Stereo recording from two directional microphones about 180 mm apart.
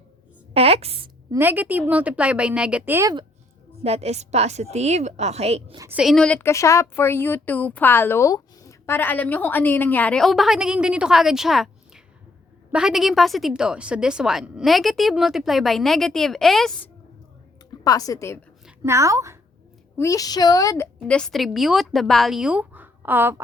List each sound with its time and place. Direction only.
0.5 s a woman's voice: 35° right (ahead or behind)
1.3 s a woman's voice: 10° right (ahead or behind)
3.8 s a woman's voice: 35° right (ahead or behind)
5.9 s a woman's voice: centre (ahead or behind)
17.8 s a woman's voice: 20° left (ahead or behind)
18.8 s a woman's voice: 15° right (ahead or behind)
20.0 s a woman's voice: 20° left (ahead or behind)
21.1 s a woman's voice: 5° left (ahead or behind)